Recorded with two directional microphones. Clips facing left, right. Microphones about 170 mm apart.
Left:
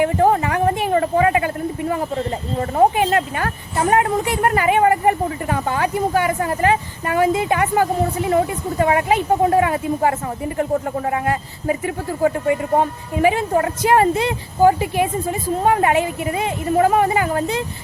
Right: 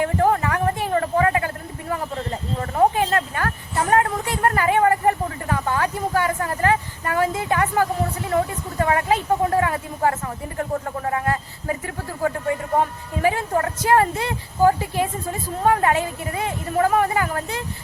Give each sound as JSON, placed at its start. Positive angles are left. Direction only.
{"t": 0.0, "sound": "a woman's voice", "side_deg": 20}